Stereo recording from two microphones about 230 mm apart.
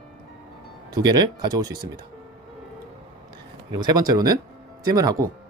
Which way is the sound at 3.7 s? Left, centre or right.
Centre.